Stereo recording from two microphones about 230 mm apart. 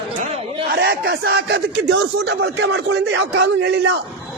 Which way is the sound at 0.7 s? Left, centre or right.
Right.